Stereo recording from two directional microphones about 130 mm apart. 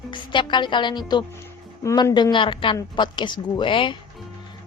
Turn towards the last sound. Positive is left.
turn(degrees=40)  # may be behind; listen again after turning